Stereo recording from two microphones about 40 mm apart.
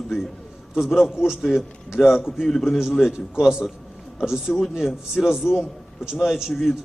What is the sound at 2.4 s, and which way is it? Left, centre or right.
Speech, centre.